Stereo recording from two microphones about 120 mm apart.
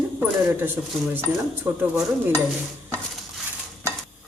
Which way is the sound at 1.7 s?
20° right (ahead or behind).